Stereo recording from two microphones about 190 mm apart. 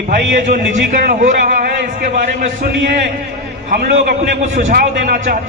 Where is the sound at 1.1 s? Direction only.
45° right (ahead or behind).